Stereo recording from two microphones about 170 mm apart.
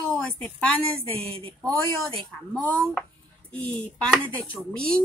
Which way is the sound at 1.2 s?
35° right (ahead or behind).